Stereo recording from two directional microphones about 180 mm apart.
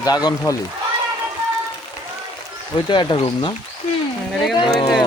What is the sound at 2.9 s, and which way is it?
Speech, 25° left (ahead or behind).